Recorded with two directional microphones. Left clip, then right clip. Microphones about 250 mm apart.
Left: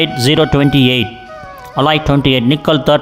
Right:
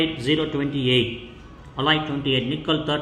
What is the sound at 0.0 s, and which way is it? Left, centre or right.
A man's voice, left.